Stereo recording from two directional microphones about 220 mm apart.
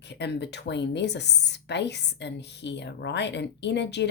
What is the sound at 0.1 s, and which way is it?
Speech, 50° left (ahead or behind).